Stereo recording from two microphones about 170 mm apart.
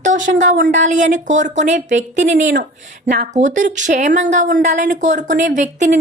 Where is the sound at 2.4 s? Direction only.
90° right.